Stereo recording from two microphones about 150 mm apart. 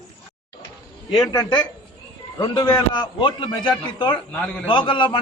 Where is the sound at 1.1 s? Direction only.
25° left (ahead or behind).